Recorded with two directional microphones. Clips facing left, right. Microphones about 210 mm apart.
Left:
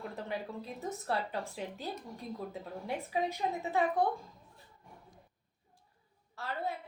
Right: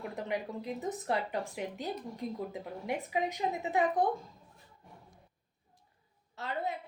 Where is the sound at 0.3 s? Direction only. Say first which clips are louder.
Right 6 dB; 15° right (ahead or behind).